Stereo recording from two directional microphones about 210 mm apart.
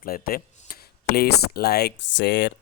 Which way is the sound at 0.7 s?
45° left (ahead or behind).